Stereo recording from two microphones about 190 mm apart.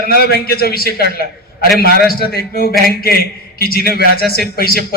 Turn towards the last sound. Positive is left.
turn(degrees=50)  # may be behind; listen again after turning